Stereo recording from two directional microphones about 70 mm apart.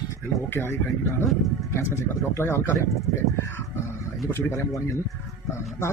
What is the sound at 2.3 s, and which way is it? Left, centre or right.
Speech, left.